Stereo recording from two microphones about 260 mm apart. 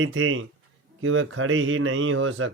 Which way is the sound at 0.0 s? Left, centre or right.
Right.